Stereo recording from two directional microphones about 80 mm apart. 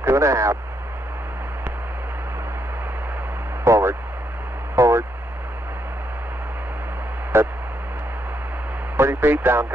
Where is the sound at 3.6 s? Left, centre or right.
Right.